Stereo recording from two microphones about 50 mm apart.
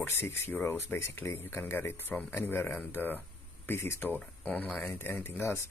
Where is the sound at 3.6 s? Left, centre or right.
Left.